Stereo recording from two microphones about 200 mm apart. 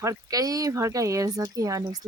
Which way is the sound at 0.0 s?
15° right (ahead or behind).